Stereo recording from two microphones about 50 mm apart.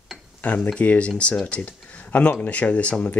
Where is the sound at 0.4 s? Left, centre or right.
Left.